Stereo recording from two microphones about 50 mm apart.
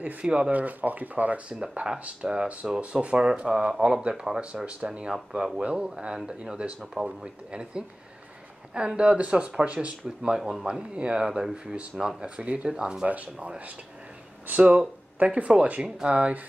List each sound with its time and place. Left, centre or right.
0.2 s speech: centre
0.5 s speech: right
1.6 s speech: centre
5.1 s speech: centre
5.6 s speech: right
5.9 s speech: centre
13.1 s speech: right
14.6 s speech: centre